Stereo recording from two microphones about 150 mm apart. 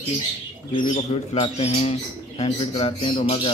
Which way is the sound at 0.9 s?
50° left (ahead or behind).